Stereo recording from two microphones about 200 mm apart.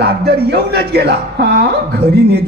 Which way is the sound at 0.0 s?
55° right (ahead or behind).